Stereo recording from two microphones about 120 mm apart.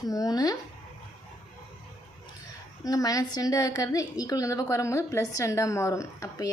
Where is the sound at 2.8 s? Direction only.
30° left (ahead or behind).